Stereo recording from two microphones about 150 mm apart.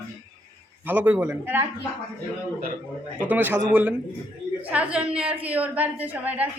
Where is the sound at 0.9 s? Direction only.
10° right (ahead or behind).